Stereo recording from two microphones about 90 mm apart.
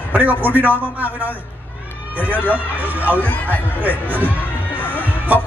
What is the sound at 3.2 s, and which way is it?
Speech, 20° left (ahead or behind).